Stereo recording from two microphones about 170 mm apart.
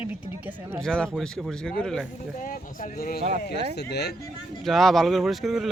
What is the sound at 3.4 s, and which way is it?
Speech, 70° left (ahead or behind).